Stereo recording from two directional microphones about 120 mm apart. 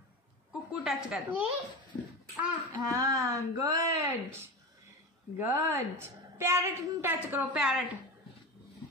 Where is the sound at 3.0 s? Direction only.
25° right (ahead or behind).